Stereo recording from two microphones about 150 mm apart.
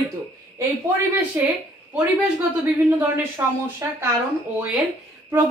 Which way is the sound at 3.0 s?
15° right (ahead or behind).